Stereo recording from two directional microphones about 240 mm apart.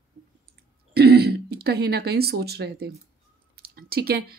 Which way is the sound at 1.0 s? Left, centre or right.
Right.